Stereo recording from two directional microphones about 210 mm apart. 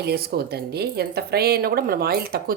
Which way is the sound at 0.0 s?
50° right (ahead or behind).